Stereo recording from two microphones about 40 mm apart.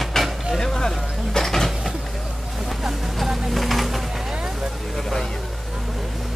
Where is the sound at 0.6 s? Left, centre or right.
Centre.